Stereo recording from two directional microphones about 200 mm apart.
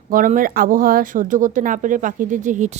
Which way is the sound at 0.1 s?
45° right (ahead or behind).